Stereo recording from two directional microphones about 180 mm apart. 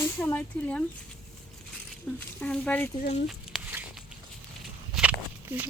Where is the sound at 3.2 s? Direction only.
5° right (ahead or behind).